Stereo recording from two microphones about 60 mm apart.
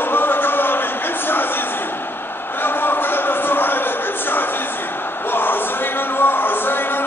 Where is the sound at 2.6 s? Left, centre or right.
Left.